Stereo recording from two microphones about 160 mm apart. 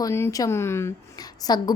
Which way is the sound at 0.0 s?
20° left (ahead or behind).